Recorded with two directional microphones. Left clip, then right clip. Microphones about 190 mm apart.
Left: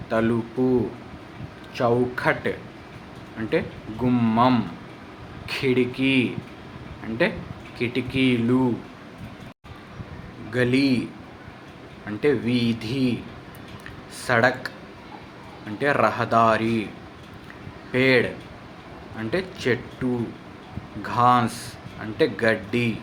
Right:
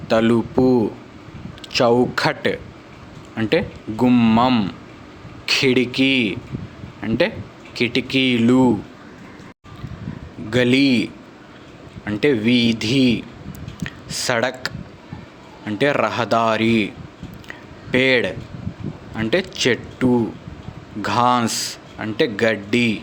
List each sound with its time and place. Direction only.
0.1 s speech: 55° right (ahead or behind)
1.7 s speech: 55° right (ahead or behind)
4.0 s speech: 45° right (ahead or behind)
10.5 s speech: 50° right (ahead or behind)
17.9 s speech: 45° right (ahead or behind)